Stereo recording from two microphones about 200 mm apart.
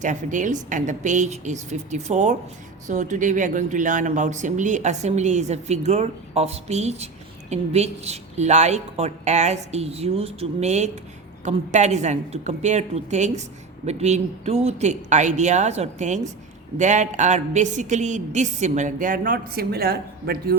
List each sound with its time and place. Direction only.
0.0 s speech: 40° right (ahead or behind)